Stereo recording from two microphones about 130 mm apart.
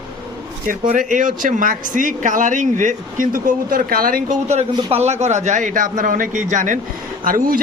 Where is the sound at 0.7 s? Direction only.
90° right.